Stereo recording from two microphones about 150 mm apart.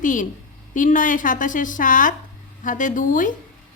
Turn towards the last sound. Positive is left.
turn(degrees=60)  # may be behind; listen again after turning